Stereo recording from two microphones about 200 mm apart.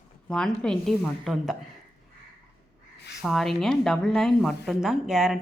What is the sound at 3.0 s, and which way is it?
Crow, 55° left (ahead or behind).